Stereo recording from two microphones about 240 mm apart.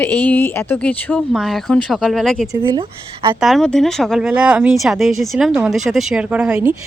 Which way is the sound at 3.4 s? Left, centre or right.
Centre.